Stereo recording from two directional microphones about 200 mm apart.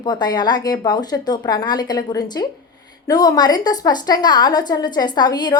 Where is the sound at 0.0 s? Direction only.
20° left (ahead or behind).